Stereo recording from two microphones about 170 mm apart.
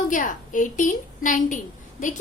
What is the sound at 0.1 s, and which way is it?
A woman's voice, 50° left (ahead or behind).